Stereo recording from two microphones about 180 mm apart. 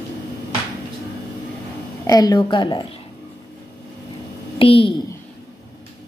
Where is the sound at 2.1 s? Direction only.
20° left (ahead or behind).